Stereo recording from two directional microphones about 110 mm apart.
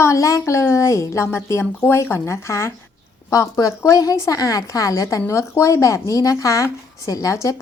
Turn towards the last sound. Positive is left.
turn(degrees=30)  # may be behind; listen again after turning